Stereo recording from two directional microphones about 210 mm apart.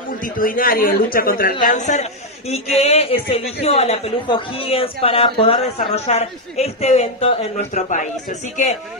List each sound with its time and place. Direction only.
0.4 s a man's voice: 45° left (ahead or behind)